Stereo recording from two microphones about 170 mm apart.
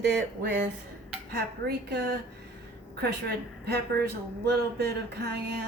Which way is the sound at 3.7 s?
70° right (ahead or behind).